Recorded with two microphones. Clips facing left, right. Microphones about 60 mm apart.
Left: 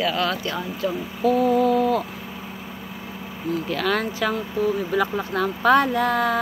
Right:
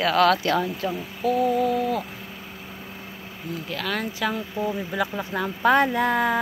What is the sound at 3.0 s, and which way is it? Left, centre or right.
Vehicle, centre.